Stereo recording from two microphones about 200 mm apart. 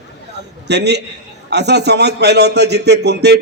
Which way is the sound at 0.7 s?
55° right (ahead or behind).